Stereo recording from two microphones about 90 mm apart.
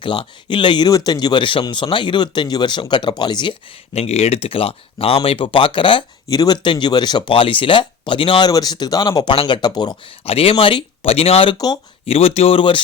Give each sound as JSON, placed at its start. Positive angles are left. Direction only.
{"t": 0.0, "sound": "speech", "side_deg": 70}
{"t": 0.9, "sound": "speech", "side_deg": 45}
{"t": 4.0, "sound": "speech", "side_deg": 90}
{"t": 6.2, "sound": "speech", "side_deg": 45}
{"t": 8.4, "sound": "speech", "side_deg": 45}
{"t": 9.3, "sound": "speech", "side_deg": 80}
{"t": 9.6, "sound": "speech", "side_deg": 50}
{"t": 10.2, "sound": "speech", "side_deg": 90}
{"t": 11.5, "sound": "speech", "side_deg": 45}
{"t": 12.0, "sound": "speech", "side_deg": 90}